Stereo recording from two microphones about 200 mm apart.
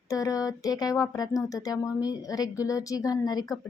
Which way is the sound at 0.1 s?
15° left (ahead or behind).